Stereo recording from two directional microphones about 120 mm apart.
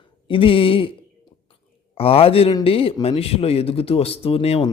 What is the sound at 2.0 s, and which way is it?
Speech, 50° left (ahead or behind).